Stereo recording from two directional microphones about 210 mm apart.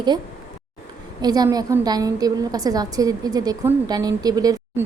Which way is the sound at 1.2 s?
20° right (ahead or behind).